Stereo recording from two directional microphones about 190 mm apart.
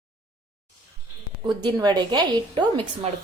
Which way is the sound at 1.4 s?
20° right (ahead or behind).